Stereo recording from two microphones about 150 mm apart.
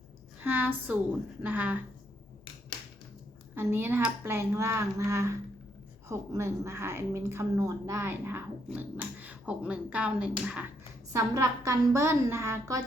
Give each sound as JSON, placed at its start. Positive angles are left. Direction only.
{"t": 0.4, "sound": "speech", "side_deg": -10}
{"t": 3.5, "sound": "speech", "side_deg": -15}
{"t": 11.1, "sound": "a woman's voice", "side_deg": -20}